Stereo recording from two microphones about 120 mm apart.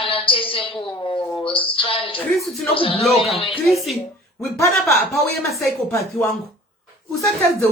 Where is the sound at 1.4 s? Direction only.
45° left (ahead or behind).